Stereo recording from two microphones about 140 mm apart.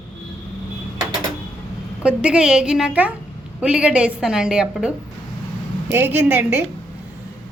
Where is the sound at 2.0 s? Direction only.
5° right (ahead or behind).